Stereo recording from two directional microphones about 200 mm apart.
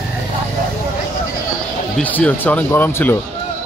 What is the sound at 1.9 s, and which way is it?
Speech, 5° left (ahead or behind).